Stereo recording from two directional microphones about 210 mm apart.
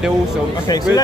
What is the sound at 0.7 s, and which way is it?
Speech, 15° left (ahead or behind).